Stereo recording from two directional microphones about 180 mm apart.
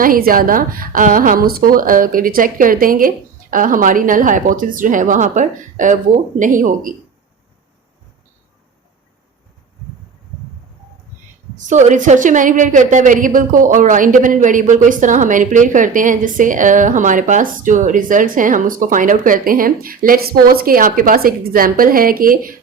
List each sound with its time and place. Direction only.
0.0 s a woman's voice: 55° right (ahead or behind)
11.5 s a woman's voice: 40° right (ahead or behind)